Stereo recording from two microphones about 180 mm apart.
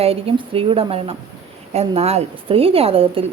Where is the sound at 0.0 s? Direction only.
35° right (ahead or behind).